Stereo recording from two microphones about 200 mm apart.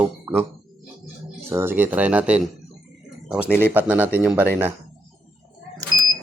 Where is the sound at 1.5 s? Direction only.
10° right (ahead or behind).